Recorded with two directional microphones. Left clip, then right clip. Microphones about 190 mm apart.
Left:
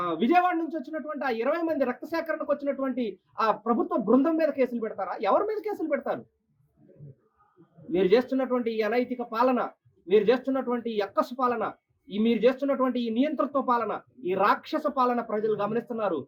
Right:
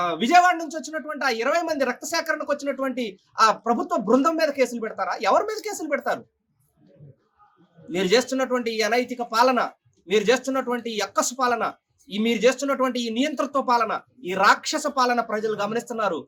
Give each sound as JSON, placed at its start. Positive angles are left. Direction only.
{"t": 0.1, "sound": "speech", "side_deg": -15}
{"t": 7.9, "sound": "speech", "side_deg": -15}
{"t": 15.4, "sound": "speech", "side_deg": -40}